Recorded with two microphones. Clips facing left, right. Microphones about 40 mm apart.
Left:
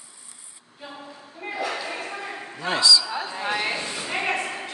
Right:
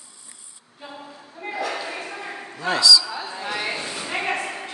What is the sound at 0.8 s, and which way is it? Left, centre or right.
Female singing, centre.